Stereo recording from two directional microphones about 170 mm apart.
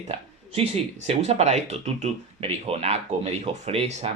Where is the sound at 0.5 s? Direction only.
35° right (ahead or behind).